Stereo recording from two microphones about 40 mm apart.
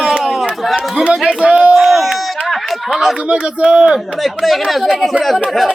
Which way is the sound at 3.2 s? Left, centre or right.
Right.